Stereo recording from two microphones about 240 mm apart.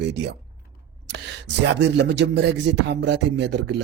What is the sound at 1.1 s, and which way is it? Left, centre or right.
Speech, right.